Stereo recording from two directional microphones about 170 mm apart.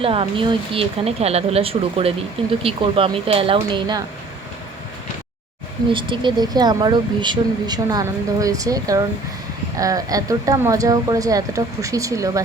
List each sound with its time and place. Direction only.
0.0 s speech: 30° right (ahead or behind)
5.9 s speech: 30° right (ahead or behind)